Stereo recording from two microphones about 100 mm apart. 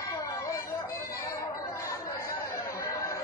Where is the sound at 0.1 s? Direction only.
30° left (ahead or behind).